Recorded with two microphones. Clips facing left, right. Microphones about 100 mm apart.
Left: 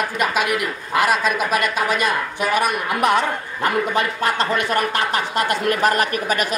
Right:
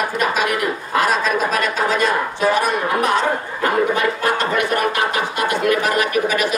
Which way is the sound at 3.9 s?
30° left (ahead or behind).